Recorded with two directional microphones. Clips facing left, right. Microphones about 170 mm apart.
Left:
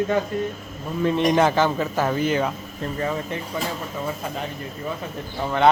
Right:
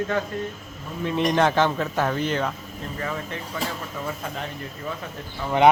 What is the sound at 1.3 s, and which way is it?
Speech, 5° left (ahead or behind).